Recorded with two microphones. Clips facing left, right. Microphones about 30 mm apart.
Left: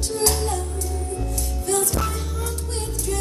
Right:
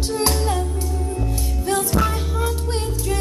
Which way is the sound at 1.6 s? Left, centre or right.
Right.